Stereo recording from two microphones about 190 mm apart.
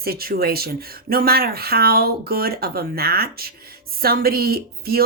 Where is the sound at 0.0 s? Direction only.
50° right (ahead or behind).